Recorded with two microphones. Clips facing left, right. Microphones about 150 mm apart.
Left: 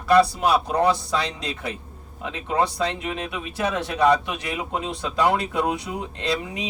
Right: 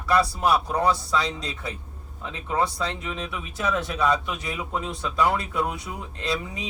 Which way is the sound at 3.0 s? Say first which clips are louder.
Left 3 dB; 70° left (ahead or behind).